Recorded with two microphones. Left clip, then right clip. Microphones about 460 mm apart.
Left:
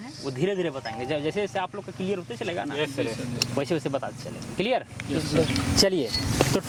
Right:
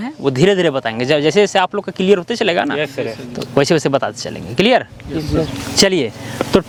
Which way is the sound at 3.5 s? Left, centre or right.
Right.